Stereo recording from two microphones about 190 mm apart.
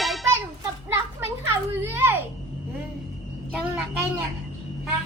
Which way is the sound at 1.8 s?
10° right (ahead or behind).